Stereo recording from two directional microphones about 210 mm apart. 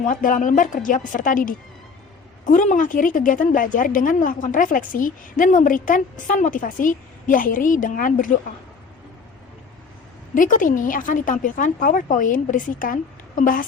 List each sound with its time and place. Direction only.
0.1 s speech: 40° left (ahead or behind)
10.3 s speech: 40° left (ahead or behind)